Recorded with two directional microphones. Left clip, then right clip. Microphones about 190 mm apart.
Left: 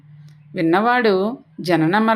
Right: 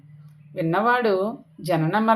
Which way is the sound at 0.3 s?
45° left (ahead or behind).